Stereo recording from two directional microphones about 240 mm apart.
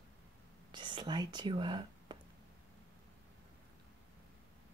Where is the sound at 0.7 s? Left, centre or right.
Centre.